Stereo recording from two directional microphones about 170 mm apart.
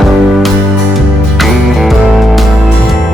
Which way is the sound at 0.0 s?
Centre (ahead or behind).